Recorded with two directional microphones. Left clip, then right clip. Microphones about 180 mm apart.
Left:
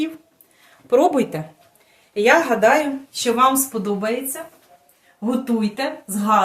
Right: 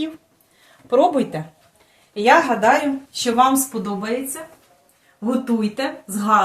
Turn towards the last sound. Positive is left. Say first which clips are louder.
# right 1 dB
turn(degrees=20)  # may be behind; listen again after turning